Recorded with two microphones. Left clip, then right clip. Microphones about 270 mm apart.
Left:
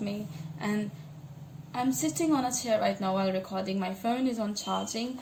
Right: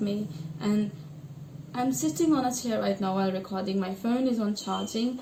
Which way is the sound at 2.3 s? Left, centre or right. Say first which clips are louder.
Even; left.